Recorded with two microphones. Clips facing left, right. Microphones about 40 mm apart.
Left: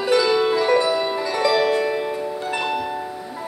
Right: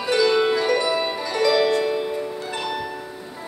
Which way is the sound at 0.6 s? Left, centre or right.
Left.